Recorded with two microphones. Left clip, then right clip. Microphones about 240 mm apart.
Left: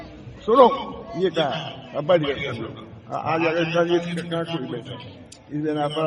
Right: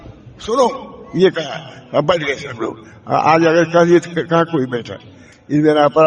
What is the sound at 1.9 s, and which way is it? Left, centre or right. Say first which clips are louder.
A man's voice: right 5 dB; right.